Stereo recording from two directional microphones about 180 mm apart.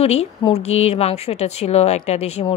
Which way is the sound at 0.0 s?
35° left (ahead or behind).